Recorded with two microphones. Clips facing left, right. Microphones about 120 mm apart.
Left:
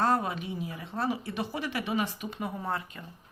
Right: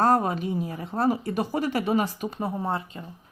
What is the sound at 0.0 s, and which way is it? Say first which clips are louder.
A woman's voice: right 6 dB; 45° right (ahead or behind).